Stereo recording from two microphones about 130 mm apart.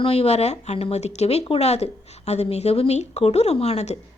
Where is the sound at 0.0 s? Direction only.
50° left (ahead or behind).